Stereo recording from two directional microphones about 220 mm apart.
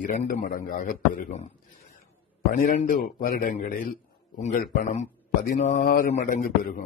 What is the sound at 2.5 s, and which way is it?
A man's voice, 40° left (ahead or behind).